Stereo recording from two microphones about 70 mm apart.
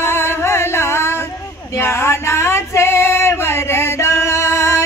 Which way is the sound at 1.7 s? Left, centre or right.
Left.